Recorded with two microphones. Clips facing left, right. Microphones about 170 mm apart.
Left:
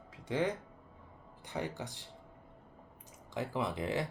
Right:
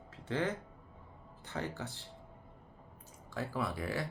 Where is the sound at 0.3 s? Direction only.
15° left (ahead or behind).